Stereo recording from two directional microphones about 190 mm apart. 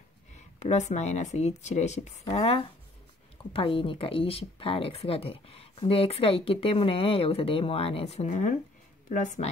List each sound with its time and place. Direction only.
0.6 s speech: 35° left (ahead or behind)